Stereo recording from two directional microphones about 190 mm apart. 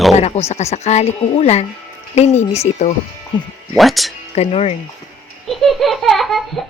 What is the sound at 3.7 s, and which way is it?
Speech, centre (ahead or behind).